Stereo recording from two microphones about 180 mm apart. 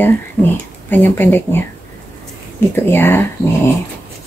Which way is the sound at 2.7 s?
10° left (ahead or behind).